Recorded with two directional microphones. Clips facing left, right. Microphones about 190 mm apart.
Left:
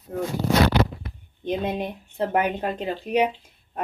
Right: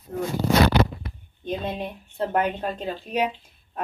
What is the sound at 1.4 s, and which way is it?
Speech, 15° left (ahead or behind).